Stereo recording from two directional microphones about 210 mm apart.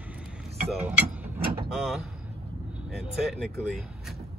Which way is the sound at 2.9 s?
Centre (ahead or behind).